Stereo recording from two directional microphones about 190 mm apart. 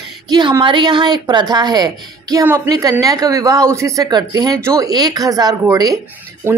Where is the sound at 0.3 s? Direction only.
20° right (ahead or behind).